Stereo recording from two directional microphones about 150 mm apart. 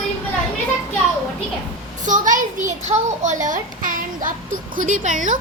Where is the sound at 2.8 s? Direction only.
50° right (ahead or behind).